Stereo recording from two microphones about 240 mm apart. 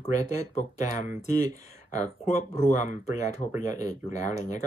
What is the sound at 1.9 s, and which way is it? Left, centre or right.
Speech, left.